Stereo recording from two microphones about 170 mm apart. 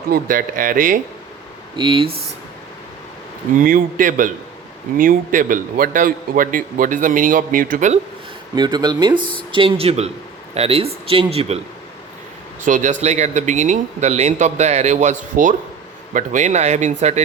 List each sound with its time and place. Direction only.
0.1 s a man's voice: 55° right (ahead or behind)
1.7 s speech: 30° right (ahead or behind)
3.6 s a man's voice: 55° right (ahead or behind)
8.5 s speech: 25° right (ahead or behind)
12.6 s a man's voice: 45° right (ahead or behind)